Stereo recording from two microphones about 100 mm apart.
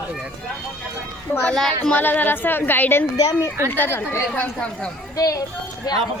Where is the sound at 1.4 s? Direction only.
5° left (ahead or behind).